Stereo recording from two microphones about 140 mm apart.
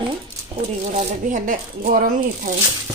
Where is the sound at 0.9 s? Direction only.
80° right.